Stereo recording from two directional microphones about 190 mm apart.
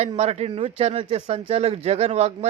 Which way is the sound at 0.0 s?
35° right (ahead or behind).